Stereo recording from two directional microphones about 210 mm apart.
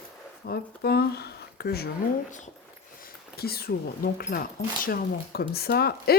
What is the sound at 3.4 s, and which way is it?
Speech, 45° left (ahead or behind).